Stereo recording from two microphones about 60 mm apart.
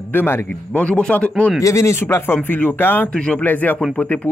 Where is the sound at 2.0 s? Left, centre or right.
Left.